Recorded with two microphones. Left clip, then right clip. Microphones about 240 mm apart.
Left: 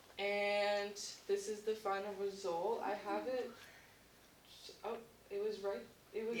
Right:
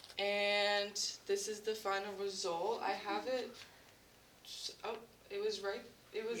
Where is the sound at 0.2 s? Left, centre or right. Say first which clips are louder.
Right 2 dB; right.